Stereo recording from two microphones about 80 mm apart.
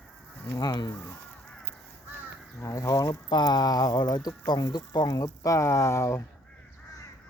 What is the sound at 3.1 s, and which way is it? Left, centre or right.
Speech, left.